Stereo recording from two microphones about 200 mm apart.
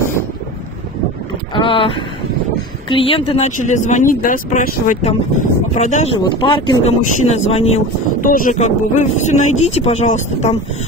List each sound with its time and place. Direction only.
1.5 s speech: 25° left (ahead or behind)
6.1 s speech: 25° left (ahead or behind)
8.3 s speech: 40° left (ahead or behind)